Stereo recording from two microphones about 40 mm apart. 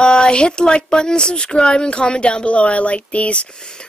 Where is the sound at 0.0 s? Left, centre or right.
Left.